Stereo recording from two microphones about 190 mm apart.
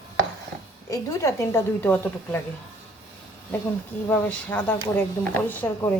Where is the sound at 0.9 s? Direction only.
15° left (ahead or behind).